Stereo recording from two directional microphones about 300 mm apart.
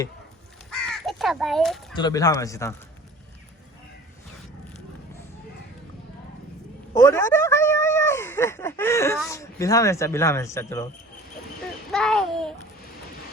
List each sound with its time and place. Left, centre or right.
0.7 s caw: centre
2.0 s speech: centre
6.9 s speech: centre
11.9 s babbling: centre